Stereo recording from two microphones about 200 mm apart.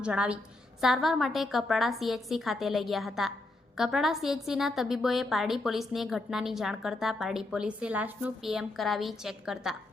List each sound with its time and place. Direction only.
0.0 s a woman's voice: 5° right (ahead or behind)